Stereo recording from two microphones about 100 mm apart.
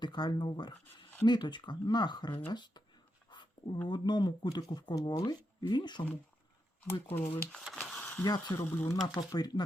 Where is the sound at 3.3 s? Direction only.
50° left (ahead or behind).